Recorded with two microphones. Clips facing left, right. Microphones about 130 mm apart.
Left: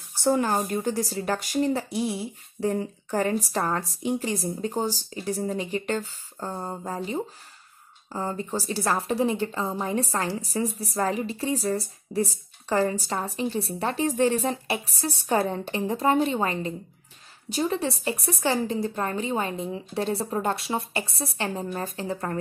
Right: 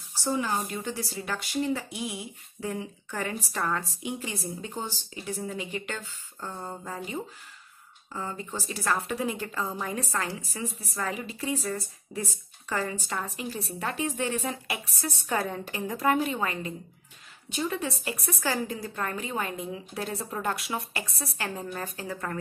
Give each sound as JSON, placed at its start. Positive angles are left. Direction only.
{"t": 0.2, "sound": "speech", "side_deg": 55}
{"t": 0.7, "sound": "a woman's voice", "side_deg": 40}